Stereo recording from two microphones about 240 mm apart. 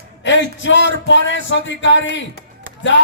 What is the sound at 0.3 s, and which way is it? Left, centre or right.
Speech, left.